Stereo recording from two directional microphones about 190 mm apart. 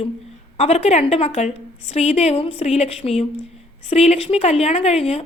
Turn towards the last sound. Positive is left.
turn(degrees=35)  # may be behind; listen again after turning